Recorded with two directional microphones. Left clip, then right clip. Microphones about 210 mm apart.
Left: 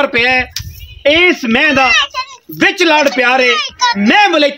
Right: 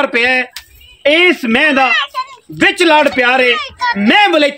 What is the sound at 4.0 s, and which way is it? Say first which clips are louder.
Speech: right 1 dB; 5° right (ahead or behind).